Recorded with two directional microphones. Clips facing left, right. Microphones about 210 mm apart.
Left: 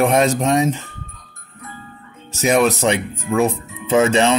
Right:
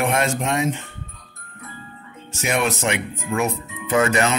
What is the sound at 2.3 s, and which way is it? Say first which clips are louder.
Speech: left 7 dB; 40° left (ahead or behind).